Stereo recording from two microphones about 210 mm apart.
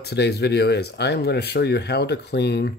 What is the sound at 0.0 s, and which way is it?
Speech, 50° left (ahead or behind).